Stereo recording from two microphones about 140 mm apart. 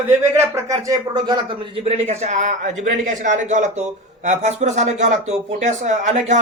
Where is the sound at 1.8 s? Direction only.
50° right (ahead or behind).